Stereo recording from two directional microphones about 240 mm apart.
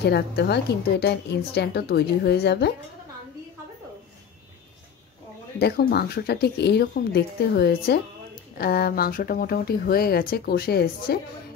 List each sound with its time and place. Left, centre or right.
0.0 s a woman's voice: left
5.6 s a woman's voice: left